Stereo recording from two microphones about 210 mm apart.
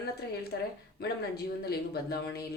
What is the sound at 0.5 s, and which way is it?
Speech, 55° left (ahead or behind).